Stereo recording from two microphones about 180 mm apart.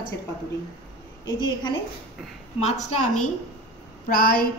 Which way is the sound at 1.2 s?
25° left (ahead or behind).